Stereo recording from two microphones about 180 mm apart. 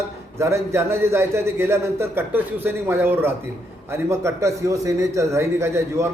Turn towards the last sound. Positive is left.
turn(degrees=-15)  # may be behind; listen again after turning